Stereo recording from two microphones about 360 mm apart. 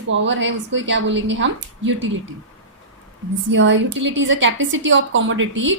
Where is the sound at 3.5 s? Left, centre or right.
Right.